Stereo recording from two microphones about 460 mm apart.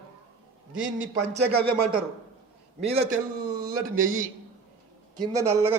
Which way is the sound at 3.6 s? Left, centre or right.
Centre.